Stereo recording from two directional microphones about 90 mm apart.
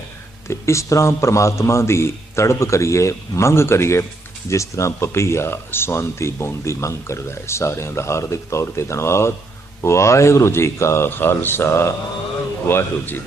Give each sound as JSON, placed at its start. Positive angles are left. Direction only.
{"t": 0.4, "sound": "speech", "side_deg": 30}